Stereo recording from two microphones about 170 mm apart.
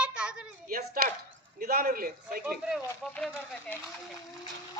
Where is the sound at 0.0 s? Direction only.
5° right (ahead or behind).